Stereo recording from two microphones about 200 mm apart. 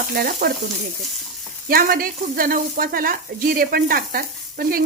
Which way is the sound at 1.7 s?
45° right (ahead or behind).